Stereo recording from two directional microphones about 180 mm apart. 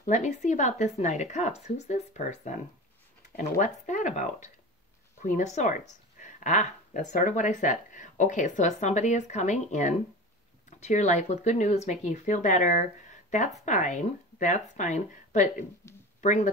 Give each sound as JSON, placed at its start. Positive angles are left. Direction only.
{"t": 0.0, "sound": "speech", "side_deg": 40}
{"t": 15.8, "sound": "speech", "side_deg": 15}
{"t": 16.2, "sound": "speech", "side_deg": 40}